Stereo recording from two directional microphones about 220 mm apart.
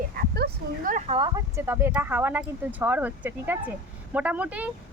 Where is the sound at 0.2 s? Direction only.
45° right (ahead or behind); by 1.6 s 20° right (ahead or behind).